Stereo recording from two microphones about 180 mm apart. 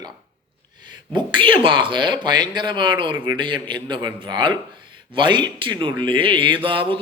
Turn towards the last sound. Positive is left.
turn(degrees=-30)  # may be behind; listen again after turning